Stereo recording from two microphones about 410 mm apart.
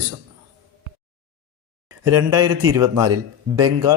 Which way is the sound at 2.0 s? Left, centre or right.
Right.